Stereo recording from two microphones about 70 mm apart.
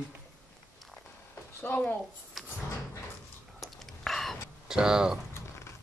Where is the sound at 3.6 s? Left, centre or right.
Centre.